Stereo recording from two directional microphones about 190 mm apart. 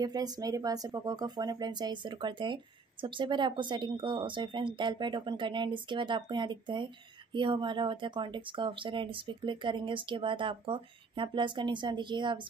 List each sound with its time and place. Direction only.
0.0 s speech: 20° right (ahead or behind)